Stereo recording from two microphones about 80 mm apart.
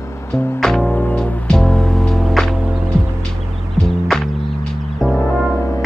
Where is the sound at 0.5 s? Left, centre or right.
Centre.